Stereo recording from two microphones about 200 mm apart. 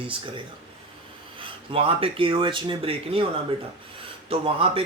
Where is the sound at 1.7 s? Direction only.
25° right (ahead or behind).